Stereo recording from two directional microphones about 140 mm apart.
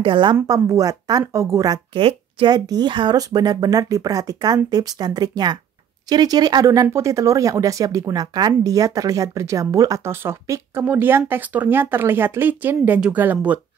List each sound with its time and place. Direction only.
0.0 s a woman's voice: 35° right (ahead or behind)
2.0 s speech: 40° right (ahead or behind); by 13.6 s 10° right (ahead or behind)